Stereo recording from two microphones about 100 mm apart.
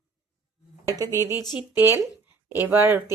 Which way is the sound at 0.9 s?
35° right (ahead or behind).